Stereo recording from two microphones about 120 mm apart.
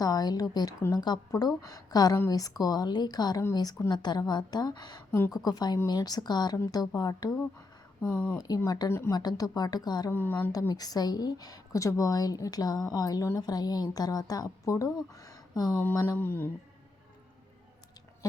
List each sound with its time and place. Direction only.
0.0 s a woman's voice: 35° left (ahead or behind)
8.0 s speech: 10° left (ahead or behind)
8.4 s a woman's voice: 30° left (ahead or behind)
10.1 s mantra: 20° left (ahead or behind)
10.5 s a woman's voice: 30° left (ahead or behind)
15.1 s a sound: 30° left (ahead or behind)
16.0 s mantra: 20° left (ahead or behind)